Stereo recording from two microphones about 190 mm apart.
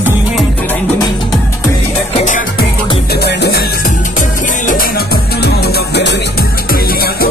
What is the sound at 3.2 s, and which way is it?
Music, 60° left (ahead or behind).